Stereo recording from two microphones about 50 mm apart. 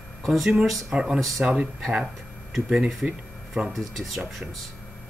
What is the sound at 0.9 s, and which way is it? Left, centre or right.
Speech, centre.